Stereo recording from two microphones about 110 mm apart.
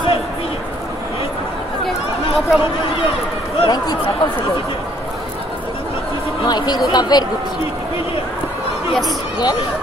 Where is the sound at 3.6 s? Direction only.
40° left (ahead or behind).